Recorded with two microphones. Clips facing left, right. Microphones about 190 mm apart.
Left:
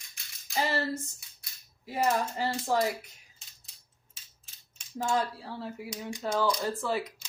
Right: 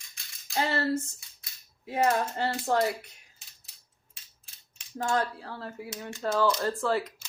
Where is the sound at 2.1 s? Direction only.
5° left (ahead or behind).